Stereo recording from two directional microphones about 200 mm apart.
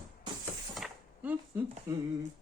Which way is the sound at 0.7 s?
5° right (ahead or behind).